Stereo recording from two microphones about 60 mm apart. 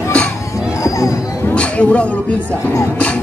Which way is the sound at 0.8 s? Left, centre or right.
Left.